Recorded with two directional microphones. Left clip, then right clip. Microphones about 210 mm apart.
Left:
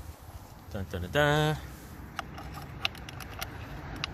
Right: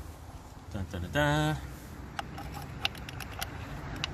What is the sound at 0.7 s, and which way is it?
Speech, 45° left (ahead or behind).